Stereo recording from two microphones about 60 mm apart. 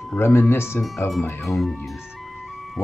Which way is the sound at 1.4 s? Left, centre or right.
Centre.